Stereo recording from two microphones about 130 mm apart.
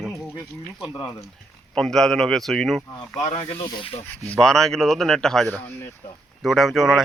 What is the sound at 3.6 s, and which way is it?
Speech, 35° left (ahead or behind).